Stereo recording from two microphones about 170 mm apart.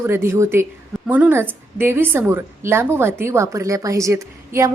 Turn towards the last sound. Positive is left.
turn(degrees=-15)  # may be behind; listen again after turning